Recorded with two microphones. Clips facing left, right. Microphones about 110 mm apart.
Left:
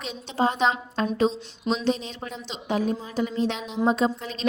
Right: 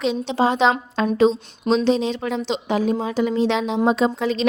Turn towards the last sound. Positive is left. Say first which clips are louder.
# right 5 dB
turn(degrees=-90)